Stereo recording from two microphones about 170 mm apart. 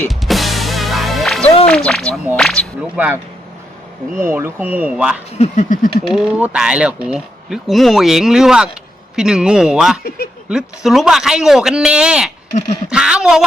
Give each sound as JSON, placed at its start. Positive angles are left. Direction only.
{"t": 0.1, "sound": "music", "side_deg": 0}
{"t": 1.6, "sound": "speech", "side_deg": 5}
{"t": 2.9, "sound": "speech", "side_deg": -10}
{"t": 4.2, "sound": "speech", "side_deg": -15}
{"t": 5.4, "sound": "a sound", "side_deg": 45}
{"t": 6.1, "sound": "speech", "side_deg": -5}